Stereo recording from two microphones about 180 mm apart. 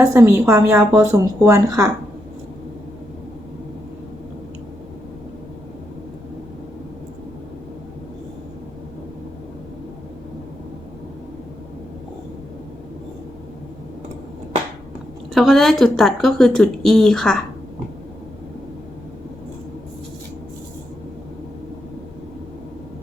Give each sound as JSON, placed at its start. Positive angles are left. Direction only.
{"t": 0.0, "sound": "speech", "side_deg": -15}
{"t": 15.4, "sound": "speech", "side_deg": 0}